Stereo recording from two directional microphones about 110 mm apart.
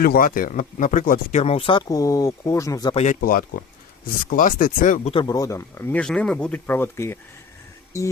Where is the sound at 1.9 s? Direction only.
30° left (ahead or behind).